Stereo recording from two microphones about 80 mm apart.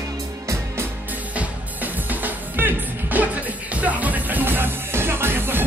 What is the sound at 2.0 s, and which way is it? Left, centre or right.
Music, right.